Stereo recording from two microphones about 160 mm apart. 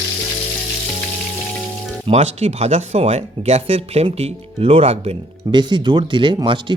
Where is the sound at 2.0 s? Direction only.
40° right (ahead or behind).